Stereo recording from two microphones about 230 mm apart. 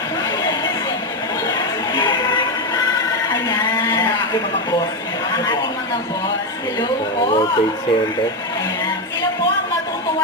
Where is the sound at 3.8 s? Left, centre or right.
Centre.